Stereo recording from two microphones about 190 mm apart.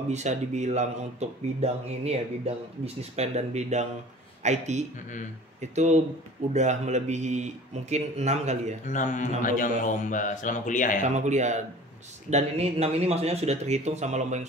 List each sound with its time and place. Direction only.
0.1 s a man's voice: 35° right (ahead or behind)
8.8 s speech: 40° left (ahead or behind)
11.1 s speech: 40° right (ahead or behind)